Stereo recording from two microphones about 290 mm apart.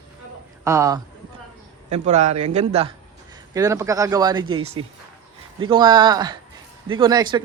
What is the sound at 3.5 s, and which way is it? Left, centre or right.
A man's voice, centre.